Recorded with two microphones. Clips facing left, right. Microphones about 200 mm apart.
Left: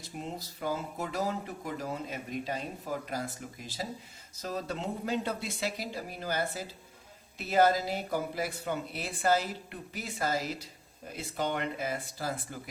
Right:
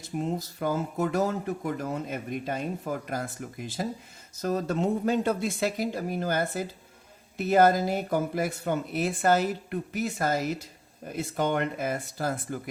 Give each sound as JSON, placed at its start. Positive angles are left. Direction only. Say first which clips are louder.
{"t": 0.2, "sound": "speech", "louder": "right 8 dB", "side_deg": -50}